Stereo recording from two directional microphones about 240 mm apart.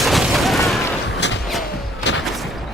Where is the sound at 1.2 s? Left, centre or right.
Left.